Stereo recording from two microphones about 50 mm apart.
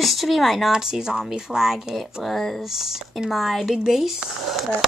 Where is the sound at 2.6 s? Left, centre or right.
Centre.